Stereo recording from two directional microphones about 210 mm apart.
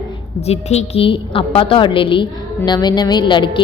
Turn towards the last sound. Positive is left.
turn(degrees=25)  # may be behind; listen again after turning